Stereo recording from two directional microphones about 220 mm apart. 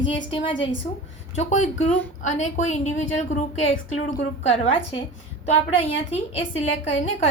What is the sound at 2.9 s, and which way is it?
A woman's voice, 30° left (ahead or behind).